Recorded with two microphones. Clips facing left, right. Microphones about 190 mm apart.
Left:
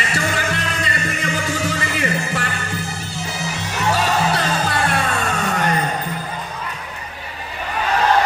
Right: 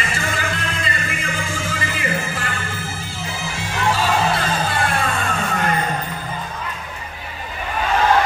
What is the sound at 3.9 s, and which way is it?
Music, 75° left (ahead or behind).